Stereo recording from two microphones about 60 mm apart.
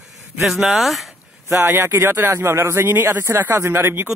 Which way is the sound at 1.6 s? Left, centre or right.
Right.